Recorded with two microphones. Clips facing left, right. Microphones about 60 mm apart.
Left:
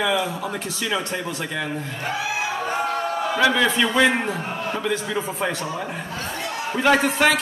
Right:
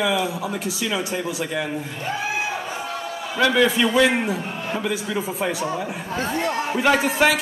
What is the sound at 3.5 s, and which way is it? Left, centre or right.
A man's voice, centre.